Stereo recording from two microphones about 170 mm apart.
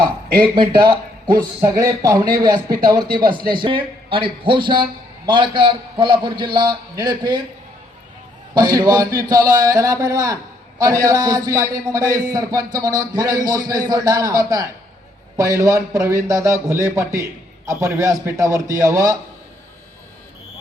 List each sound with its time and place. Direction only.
0.5 s a man's voice: 30° right (ahead or behind)
8.5 s a man's voice: 25° right (ahead or behind)